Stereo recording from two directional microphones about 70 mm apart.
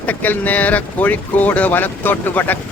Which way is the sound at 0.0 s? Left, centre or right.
Left.